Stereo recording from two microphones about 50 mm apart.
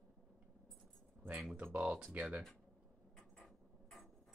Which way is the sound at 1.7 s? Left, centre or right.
Right.